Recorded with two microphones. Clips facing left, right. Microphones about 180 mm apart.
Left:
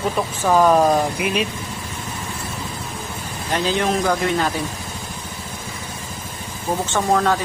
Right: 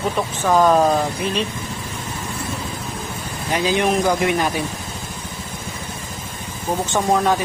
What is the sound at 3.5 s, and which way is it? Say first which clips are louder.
Speech: right 2 dB; 10° right (ahead or behind).